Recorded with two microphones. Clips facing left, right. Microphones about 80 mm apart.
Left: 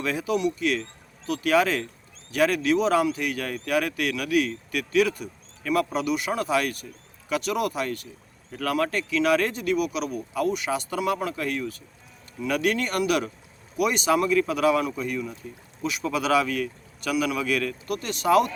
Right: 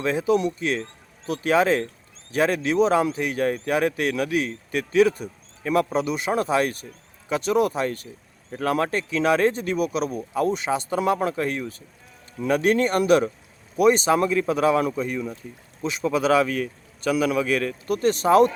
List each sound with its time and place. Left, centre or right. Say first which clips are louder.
0.0 s speech: right 4 dB; right